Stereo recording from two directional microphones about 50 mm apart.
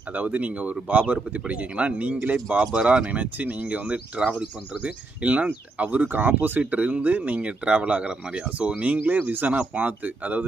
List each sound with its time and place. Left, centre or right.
0.1 s speech: right
4.2 s speech: centre
4.8 s speech: right
6.6 s speech: right
9.2 s speech: right